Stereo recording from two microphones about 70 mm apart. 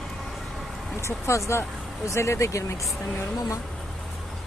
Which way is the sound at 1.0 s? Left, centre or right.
Left.